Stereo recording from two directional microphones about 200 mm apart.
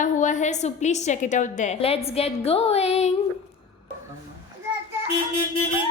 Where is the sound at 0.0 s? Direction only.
40° left (ahead or behind).